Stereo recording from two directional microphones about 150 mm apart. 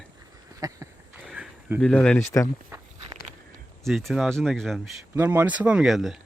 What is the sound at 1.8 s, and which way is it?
Speech, 5° left (ahead or behind).